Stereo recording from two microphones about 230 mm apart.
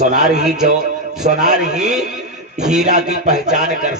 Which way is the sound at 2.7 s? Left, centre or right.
Right.